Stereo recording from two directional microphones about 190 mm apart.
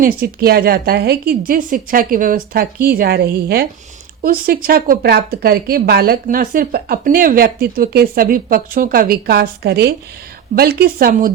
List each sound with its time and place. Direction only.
0.0 s a woman's voice: 55° right (ahead or behind)